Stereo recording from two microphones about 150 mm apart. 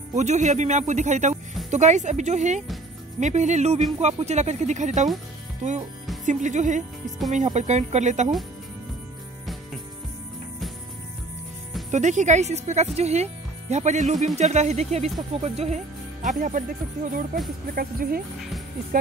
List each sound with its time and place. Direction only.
0.1 s speech: 50° right (ahead or behind)
6.2 s speech: 55° right (ahead or behind)
11.9 s speech: 55° right (ahead or behind)
17.7 s speech: 75° right (ahead or behind)